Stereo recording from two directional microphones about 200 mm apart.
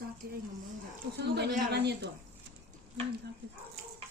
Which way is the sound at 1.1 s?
55° right (ahead or behind).